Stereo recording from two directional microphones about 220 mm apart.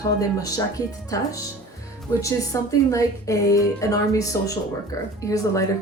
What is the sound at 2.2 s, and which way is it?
A woman's voice, 15° left (ahead or behind).